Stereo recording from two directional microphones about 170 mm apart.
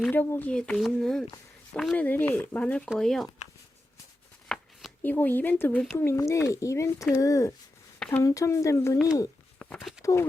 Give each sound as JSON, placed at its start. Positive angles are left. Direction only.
{"t": 0.1, "sound": "speech", "side_deg": 10}
{"t": 4.4, "sound": "speech", "side_deg": 5}
{"t": 7.9, "sound": "a sound", "side_deg": 5}
{"t": 8.2, "sound": "speech", "side_deg": 20}
{"t": 9.6, "sound": "a sound", "side_deg": 5}
{"t": 10.0, "sound": "speech", "side_deg": 20}